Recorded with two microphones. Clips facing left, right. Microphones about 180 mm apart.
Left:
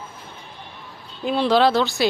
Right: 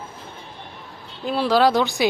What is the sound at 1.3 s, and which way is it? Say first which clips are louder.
Speech: even; 5° right (ahead or behind).